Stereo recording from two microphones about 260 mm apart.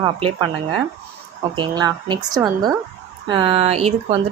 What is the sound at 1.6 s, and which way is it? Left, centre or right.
Speech, centre.